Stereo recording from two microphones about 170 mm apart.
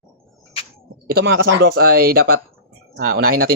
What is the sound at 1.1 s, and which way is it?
Speech, 70° right (ahead or behind).